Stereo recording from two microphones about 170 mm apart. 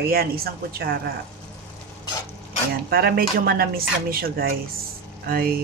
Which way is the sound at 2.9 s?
65° right (ahead or behind).